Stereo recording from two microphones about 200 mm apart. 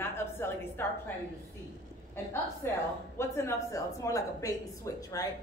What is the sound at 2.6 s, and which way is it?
A woman's voice, 10° left (ahead or behind).